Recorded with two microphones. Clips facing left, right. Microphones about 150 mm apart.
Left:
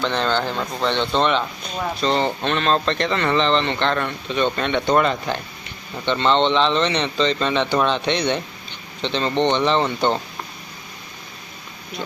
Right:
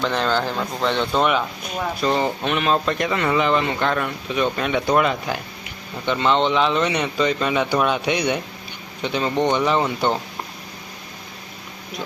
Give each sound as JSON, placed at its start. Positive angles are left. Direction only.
{"t": 0.0, "sound": "speech", "side_deg": 0}